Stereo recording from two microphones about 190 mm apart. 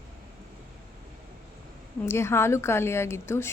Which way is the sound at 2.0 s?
15° left (ahead or behind).